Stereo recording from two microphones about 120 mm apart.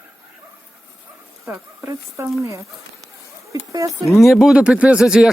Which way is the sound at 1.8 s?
25° right (ahead or behind).